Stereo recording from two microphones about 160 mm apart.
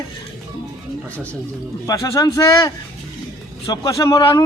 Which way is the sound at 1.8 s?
20° left (ahead or behind).